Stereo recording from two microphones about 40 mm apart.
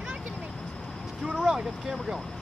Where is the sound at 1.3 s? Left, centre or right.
Centre.